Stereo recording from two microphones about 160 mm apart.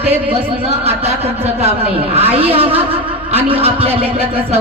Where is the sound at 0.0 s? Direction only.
40° right (ahead or behind).